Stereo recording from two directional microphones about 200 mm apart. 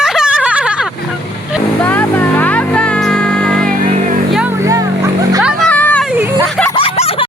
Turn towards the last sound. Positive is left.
turn(degrees=30)  # may be behind; listen again after turning